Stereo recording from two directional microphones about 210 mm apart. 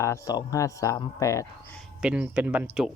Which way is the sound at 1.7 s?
5° right (ahead or behind).